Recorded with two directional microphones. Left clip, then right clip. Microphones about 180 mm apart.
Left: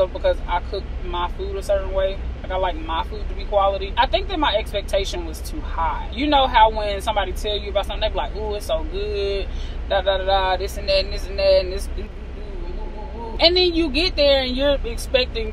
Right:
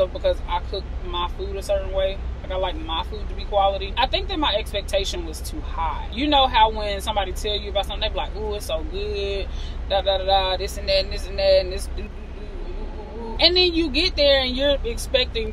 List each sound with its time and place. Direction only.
0.0 s a man's voice: 25° right (ahead or behind)
13.4 s a man's voice: 25° right (ahead or behind)